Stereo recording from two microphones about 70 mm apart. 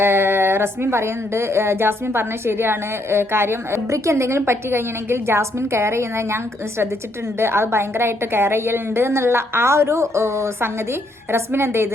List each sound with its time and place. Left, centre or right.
0.0 s speech: right